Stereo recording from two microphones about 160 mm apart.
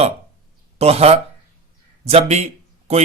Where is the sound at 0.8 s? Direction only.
40° right (ahead or behind).